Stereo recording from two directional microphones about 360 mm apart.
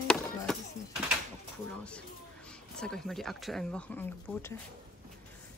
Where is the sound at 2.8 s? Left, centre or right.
Centre.